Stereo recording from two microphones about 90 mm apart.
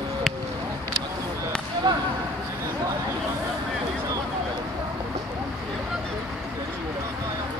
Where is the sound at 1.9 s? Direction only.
50° right (ahead or behind).